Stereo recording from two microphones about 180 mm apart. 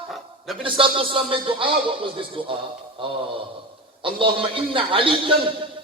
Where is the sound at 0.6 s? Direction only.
30° right (ahead or behind).